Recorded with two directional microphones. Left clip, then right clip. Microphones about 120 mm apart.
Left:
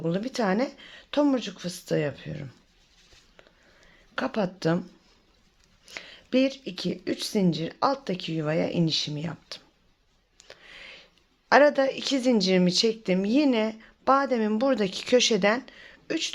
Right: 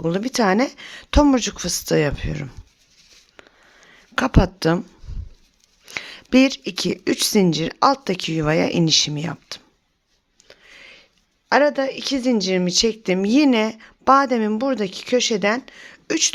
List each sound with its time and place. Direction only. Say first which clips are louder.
0.0 s speech: right 8 dB; 55° right (ahead or behind); by 2.5 s 80° right
3.4 s a sound: right 9 dB; 55° right (ahead or behind)
3.8 s speech: right 9 dB; 50° right (ahead or behind)
5.8 s speech: right 10 dB; 60° right (ahead or behind)
10.5 s a sound: right 1 dB; 15° right (ahead or behind)
11.4 s a woman's voice: right 2 dB; 15° right (ahead or behind)
13.0 s speech: right 6 dB; 45° right (ahead or behind)
14.6 s a woman's voice: right 2 dB; 20° right (ahead or behind)
15.6 s speech: right 7 dB; 45° right (ahead or behind)